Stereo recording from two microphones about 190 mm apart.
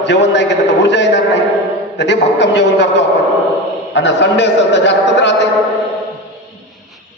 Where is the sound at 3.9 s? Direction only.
70° left (ahead or behind).